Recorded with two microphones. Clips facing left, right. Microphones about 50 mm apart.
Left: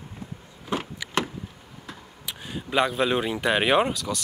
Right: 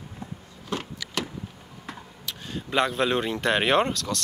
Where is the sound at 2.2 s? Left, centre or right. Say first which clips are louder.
Even; centre.